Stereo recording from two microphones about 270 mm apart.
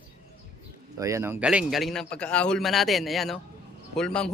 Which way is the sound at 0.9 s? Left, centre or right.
Centre.